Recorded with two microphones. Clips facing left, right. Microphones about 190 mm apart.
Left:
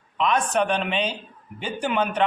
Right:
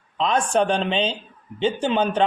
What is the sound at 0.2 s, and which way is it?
A man's voice, 30° right (ahead or behind).